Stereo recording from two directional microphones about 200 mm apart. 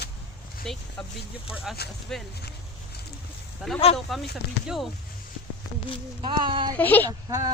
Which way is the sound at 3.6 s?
5° right (ahead or behind).